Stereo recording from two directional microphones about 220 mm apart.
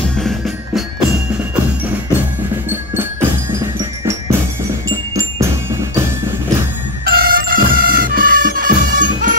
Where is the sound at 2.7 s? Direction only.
10° right (ahead or behind).